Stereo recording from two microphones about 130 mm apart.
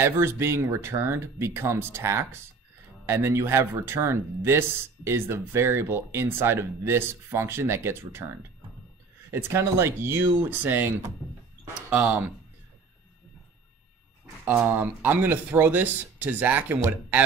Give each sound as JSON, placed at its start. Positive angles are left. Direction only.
{"t": 0.0, "sound": "speech", "side_deg": -20}
{"t": 9.3, "sound": "speech", "side_deg": -20}
{"t": 14.2, "sound": "speech", "side_deg": -15}